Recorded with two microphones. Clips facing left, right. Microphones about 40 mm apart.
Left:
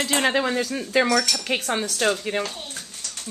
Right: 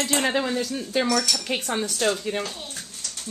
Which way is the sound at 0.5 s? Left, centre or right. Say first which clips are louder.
Left 2 dB; left.